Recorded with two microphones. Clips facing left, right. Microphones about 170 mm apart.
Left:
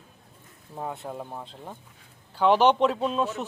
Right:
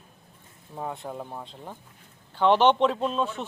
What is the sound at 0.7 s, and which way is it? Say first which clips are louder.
A man's voice: even; centre (ahead or behind).